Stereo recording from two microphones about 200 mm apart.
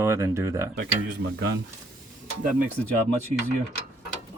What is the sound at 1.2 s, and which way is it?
Speech, 65° right (ahead or behind).